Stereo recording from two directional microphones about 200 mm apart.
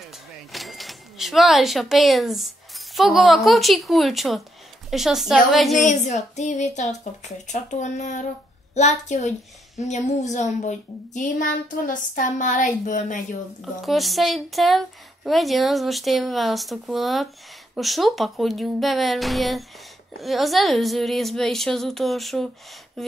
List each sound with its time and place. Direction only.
0.5 s a woman's voice: centre (ahead or behind)
5.8 s a woman's voice: 35° left (ahead or behind)
13.8 s a woman's voice: centre (ahead or behind)